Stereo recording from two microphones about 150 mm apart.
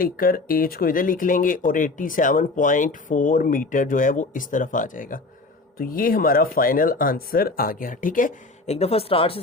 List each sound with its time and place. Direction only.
0.0 s speech: 75° left (ahead or behind)
5.7 s speech: 75° left (ahead or behind); by 9.4 s 40° left (ahead or behind)